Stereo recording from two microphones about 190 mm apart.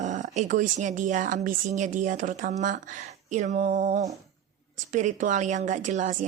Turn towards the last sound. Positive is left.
turn(degrees=-40)  # may be behind; listen again after turning